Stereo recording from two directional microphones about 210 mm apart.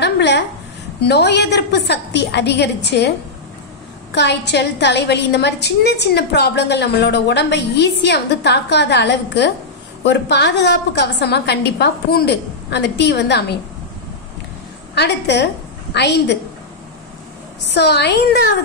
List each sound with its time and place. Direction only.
0.0 s a sound: 55° left (ahead or behind)
1.0 s a woman's voice: 55° left (ahead or behind)
4.1 s a woman's voice: 55° left (ahead or behind)
15.0 s a woman's voice: 55° left (ahead or behind)
17.7 s a woman's voice: 50° left (ahead or behind)